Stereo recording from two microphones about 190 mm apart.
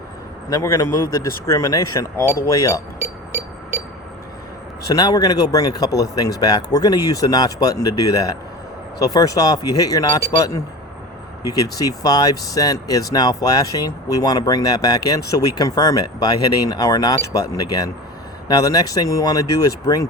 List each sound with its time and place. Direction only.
0.5 s speech: 15° left (ahead or behind)
4.9 s speech: 20° left (ahead or behind)
11.4 s speech: 20° left (ahead or behind)